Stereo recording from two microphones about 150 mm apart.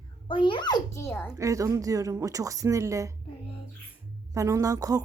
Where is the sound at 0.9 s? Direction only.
15° left (ahead or behind).